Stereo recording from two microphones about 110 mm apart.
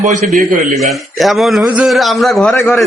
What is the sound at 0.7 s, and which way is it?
Speech, centre (ahead or behind).